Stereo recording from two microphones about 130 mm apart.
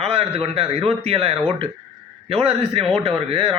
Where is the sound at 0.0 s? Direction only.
50° right (ahead or behind).